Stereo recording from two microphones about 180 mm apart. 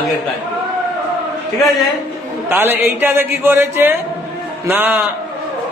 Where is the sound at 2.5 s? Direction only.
10° right (ahead or behind).